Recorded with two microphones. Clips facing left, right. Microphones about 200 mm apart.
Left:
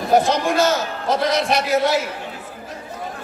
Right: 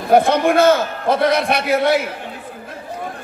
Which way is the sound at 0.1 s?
55° right (ahead or behind).